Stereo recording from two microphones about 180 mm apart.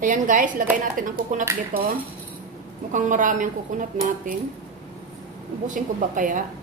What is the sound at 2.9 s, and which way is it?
Speech, 45° right (ahead or behind).